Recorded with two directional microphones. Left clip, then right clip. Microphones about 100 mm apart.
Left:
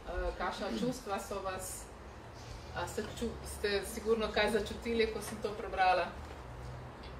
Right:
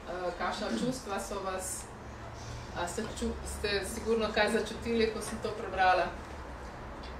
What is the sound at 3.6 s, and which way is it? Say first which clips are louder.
A woman's voice: right 1 dB; 25° right (ahead or behind).